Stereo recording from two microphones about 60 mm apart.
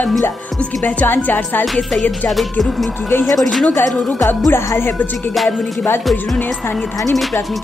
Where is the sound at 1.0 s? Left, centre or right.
Left.